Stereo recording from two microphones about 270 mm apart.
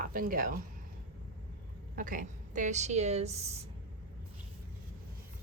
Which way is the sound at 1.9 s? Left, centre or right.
Right.